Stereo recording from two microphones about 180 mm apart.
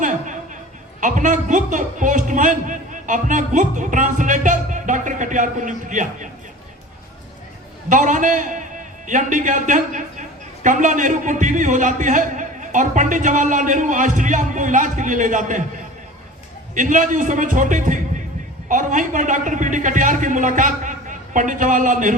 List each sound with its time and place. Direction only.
0.0 s a sound: 45° right (ahead or behind)
1.0 s a man's voice: 45° right (ahead or behind)
7.9 s a man's voice: 45° right (ahead or behind)
16.7 s a man's voice: 45° right (ahead or behind)